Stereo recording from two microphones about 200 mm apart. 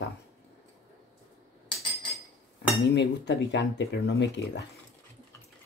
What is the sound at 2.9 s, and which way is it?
Speech, 60° left (ahead or behind).